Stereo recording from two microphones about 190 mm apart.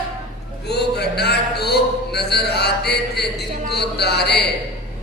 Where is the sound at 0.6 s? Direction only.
60° left (ahead or behind).